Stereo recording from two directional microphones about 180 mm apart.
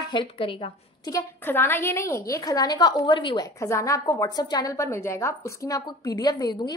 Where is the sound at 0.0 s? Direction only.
25° left (ahead or behind).